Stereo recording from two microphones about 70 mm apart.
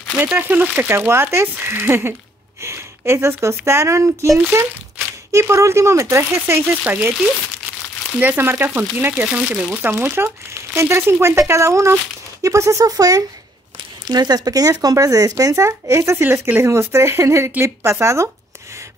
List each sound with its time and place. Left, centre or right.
0.2 s speech: right
4.4 s speech: right
5.3 s speech: right
8.2 s speech: right
9.8 s speech: right
14.0 s speech: right
16.2 s speech: right
16.6 s speech: right